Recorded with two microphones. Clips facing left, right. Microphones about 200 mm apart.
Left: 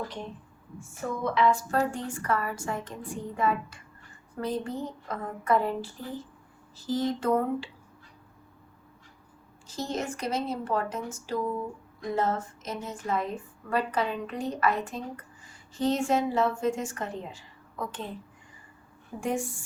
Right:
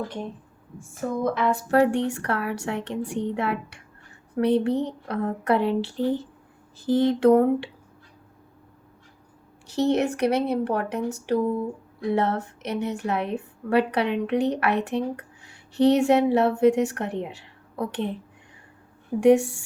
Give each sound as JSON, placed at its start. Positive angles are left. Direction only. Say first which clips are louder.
{"t": 1.2, "sound": "a woman's voice", "louder": "even", "side_deg": -50}
{"t": 6.7, "sound": "speech", "louder": "right 7 dB", "side_deg": -55}
{"t": 9.6, "sound": "a woman's voice", "louder": "right 10 dB", "side_deg": -70}
{"t": 19.2, "sound": "a woman's voice", "louder": "right 13 dB", "side_deg": -70}